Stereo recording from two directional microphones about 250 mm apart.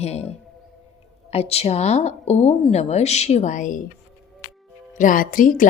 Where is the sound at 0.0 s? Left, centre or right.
Left.